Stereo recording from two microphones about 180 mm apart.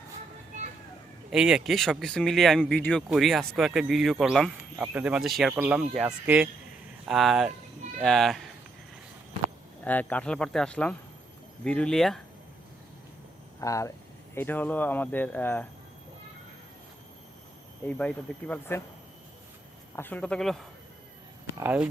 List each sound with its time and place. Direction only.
1.3 s speech: 5° right (ahead or behind)
9.8 s speech: 10° left (ahead or behind)
13.6 s speech: 15° left (ahead or behind)
17.8 s speech: 5° left (ahead or behind)
20.0 s speech: 10° left (ahead or behind)
21.6 s speech: 10° right (ahead or behind)